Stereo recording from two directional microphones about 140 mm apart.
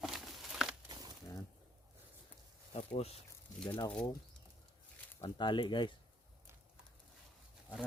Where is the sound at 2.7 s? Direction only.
50° left (ahead or behind).